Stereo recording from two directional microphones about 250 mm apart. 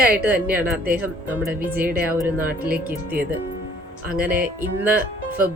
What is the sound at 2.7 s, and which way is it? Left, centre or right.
Speech, right.